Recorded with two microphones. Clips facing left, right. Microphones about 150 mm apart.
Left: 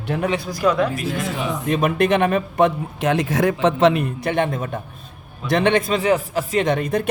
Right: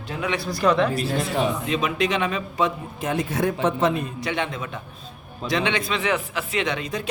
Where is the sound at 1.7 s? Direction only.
50° left (ahead or behind).